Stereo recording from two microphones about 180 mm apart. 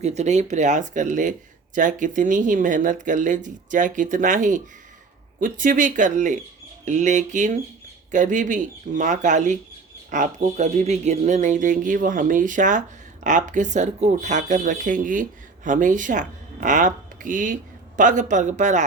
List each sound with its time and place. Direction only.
0.0 s speech: 40° right (ahead or behind)